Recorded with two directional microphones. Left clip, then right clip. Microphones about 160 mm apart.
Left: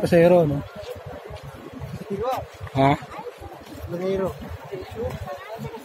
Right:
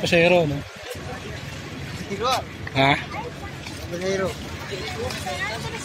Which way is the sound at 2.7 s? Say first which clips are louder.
Right 1 dB; 15° left (ahead or behind).